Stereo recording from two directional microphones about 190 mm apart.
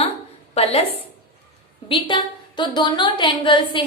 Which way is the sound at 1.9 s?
25° left (ahead or behind).